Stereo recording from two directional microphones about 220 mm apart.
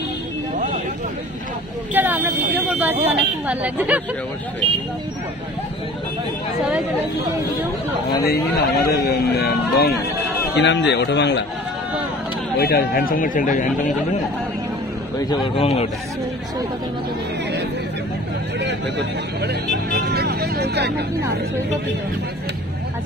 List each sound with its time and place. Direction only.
2.0 s speech: 10° right (ahead or behind)
8.2 s speech: 45° left (ahead or behind)
12.5 s speech: 45° left (ahead or behind)
15.2 s a man's voice: 20° left (ahead or behind)
19.9 s speech: 45° right (ahead or behind)